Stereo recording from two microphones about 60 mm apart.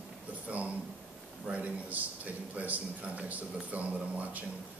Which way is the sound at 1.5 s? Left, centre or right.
Right.